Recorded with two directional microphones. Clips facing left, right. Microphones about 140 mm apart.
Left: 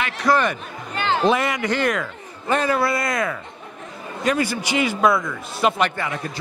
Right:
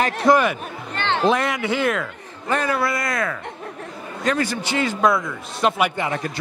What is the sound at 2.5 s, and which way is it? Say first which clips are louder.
A man's voice: left 2 dB; 25° left (ahead or behind).